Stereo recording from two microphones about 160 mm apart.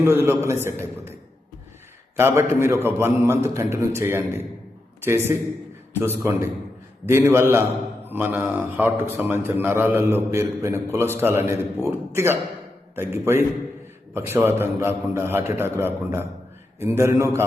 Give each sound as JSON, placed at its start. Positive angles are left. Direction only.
{"t": 0.0, "sound": "a man's voice", "side_deg": -15}
{"t": 2.1, "sound": "a man's voice", "side_deg": -15}